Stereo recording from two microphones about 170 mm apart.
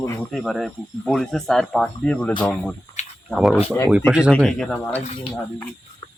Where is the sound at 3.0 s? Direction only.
45° left (ahead or behind).